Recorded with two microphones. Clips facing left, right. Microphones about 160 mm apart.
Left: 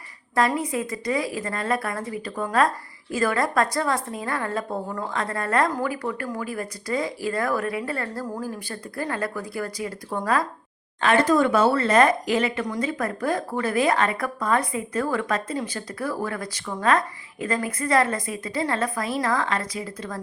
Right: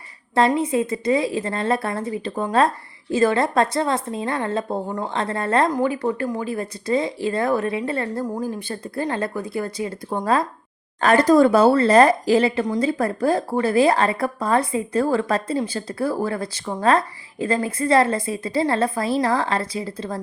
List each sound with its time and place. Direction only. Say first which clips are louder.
0.3 s a woman's voice: right 5 dB; 25° right (ahead or behind)
11.0 s speech: right 5 dB; 40° right (ahead or behind)